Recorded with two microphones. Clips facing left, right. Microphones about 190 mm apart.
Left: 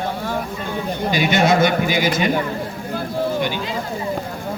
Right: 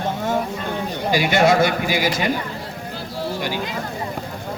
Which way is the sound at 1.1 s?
20° left (ahead or behind).